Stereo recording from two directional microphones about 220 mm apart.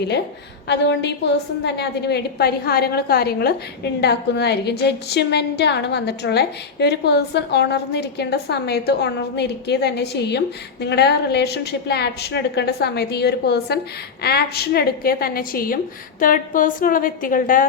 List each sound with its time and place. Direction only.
0.7 s a woman's voice: 50° left (ahead or behind)